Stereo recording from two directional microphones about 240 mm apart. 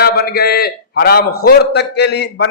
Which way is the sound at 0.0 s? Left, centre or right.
Left.